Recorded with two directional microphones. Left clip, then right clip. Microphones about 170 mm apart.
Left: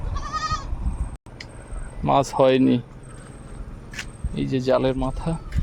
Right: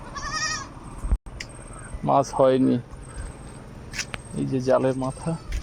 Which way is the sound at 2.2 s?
35° left (ahead or behind).